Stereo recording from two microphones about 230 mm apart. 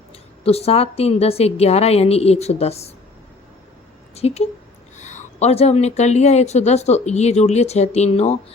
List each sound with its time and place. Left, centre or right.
0.1 s speech: left
4.1 s speech: left